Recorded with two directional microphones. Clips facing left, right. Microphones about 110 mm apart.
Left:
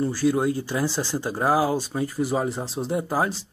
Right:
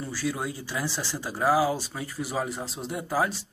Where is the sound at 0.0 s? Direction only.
25° left (ahead or behind).